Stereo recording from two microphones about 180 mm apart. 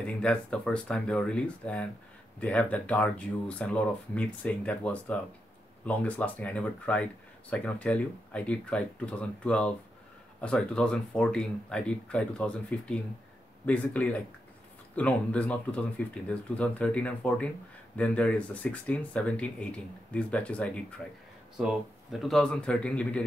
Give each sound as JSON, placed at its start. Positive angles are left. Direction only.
{"t": 0.0, "sound": "speech", "side_deg": 5}